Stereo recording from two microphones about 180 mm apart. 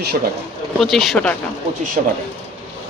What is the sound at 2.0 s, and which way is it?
Speech, 40° right (ahead or behind).